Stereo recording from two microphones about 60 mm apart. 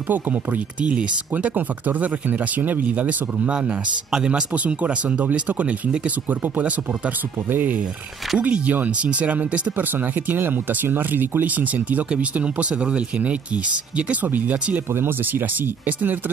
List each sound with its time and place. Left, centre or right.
0.1 s speech: right